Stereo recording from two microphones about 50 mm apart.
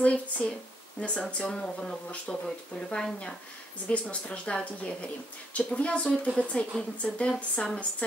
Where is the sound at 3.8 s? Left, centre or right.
Left.